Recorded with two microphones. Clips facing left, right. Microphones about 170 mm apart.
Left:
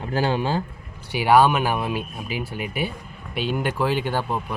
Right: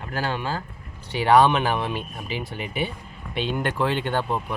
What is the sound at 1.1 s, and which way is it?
Speech, 10° left (ahead or behind).